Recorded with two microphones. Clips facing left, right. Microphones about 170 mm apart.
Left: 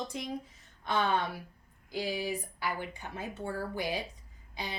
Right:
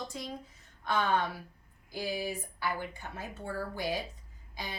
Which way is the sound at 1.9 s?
15° left (ahead or behind).